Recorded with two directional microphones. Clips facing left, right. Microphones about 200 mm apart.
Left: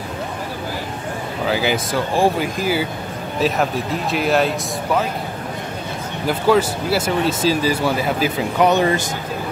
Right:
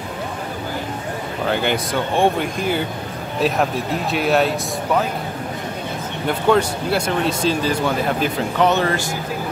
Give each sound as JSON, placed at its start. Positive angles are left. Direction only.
{"t": 1.4, "sound": "speech", "side_deg": 5}
{"t": 6.2, "sound": "speech", "side_deg": 5}